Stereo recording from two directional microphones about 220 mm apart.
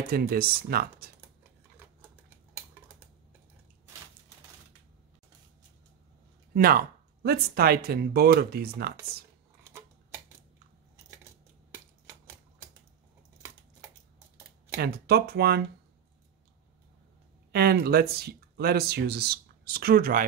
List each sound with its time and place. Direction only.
0.1 s speech: 45° right (ahead or behind)
6.5 s speech: 40° right (ahead or behind)
9.7 s a sound: 10° right (ahead or behind)
14.8 s speech: 45° right (ahead or behind)
17.5 s speech: 45° right (ahead or behind)